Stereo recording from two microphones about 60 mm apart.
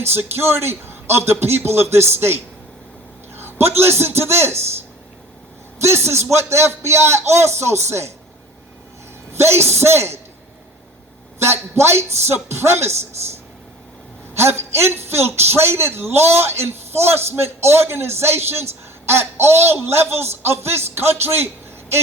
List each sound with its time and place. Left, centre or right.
0.0 s a man's voice: right
5.8 s a man's voice: right
9.3 s a man's voice: right
11.3 s a man's voice: right
14.3 s a man's voice: right